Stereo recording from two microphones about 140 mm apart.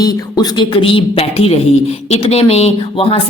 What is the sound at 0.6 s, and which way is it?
A woman's voice, 35° left (ahead or behind).